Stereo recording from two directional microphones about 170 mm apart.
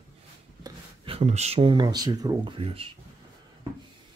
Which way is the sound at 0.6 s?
35° right (ahead or behind).